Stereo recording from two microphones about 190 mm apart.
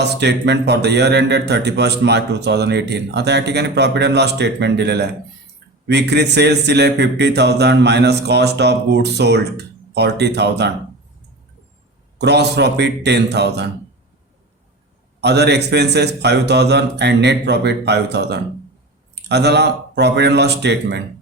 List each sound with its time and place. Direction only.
0.0 s a man's voice: 60° right (ahead or behind)
12.2 s a man's voice: 60° right (ahead or behind)
15.2 s a man's voice: 60° right (ahead or behind)